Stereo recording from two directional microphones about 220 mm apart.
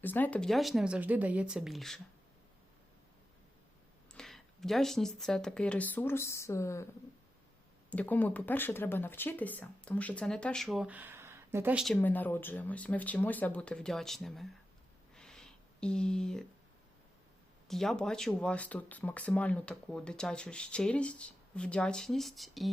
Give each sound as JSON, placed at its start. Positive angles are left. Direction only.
{"t": 0.0, "sound": "speech", "side_deg": 10}
{"t": 4.1, "sound": "speech", "side_deg": 0}
{"t": 7.9, "sound": "speech", "side_deg": 5}
{"t": 11.9, "sound": "speech", "side_deg": 10}
{"t": 15.1, "sound": "a sound", "side_deg": 5}
{"t": 17.7, "sound": "speech", "side_deg": 0}